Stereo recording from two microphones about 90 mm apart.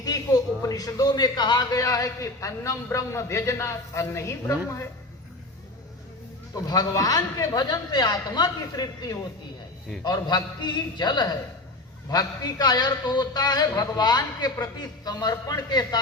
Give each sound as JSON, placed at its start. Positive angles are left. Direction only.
{"t": 0.0, "sound": "a man's voice", "side_deg": 45}
{"t": 6.5, "sound": "a man's voice", "side_deg": 45}